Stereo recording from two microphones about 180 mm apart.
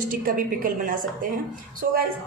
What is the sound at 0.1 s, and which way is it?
A woman's voice, 50° right (ahead or behind).